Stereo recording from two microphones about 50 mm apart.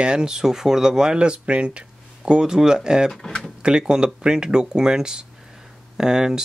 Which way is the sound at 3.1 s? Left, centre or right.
Centre.